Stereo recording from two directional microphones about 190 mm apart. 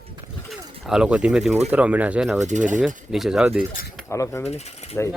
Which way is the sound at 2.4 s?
40° right (ahead or behind).